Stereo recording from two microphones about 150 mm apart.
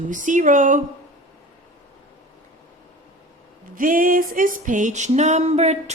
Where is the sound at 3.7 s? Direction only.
65° right (ahead or behind); by 5.8 s 45° right (ahead or behind).